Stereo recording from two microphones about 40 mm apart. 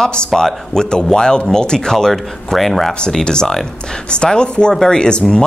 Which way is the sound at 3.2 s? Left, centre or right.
Centre.